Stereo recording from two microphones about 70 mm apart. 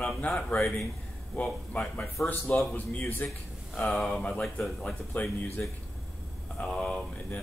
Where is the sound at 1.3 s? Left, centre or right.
Left.